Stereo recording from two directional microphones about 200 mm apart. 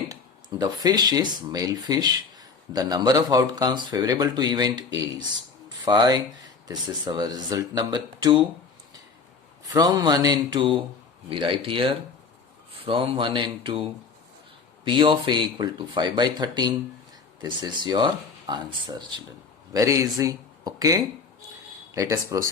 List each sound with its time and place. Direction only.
0.1 s speech: 20° right (ahead or behind)
9.7 s speech: 20° right (ahead or behind)
14.8 s speech: 25° right (ahead or behind)